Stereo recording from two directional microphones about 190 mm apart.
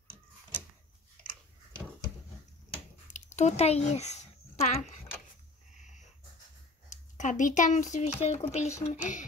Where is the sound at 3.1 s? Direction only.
40° left (ahead or behind).